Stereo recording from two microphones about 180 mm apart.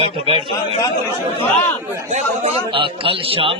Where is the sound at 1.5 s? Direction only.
15° left (ahead or behind).